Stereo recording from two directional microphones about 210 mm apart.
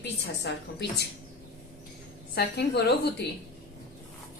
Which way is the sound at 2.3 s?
50° left (ahead or behind).